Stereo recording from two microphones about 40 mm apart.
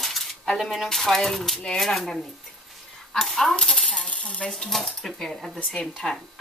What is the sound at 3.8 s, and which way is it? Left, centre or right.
Coin, left.